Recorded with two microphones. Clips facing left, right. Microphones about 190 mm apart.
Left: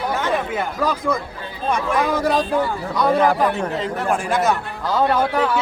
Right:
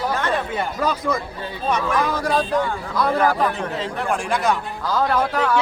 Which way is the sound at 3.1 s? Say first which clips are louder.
Left 3 dB; 20° left (ahead or behind).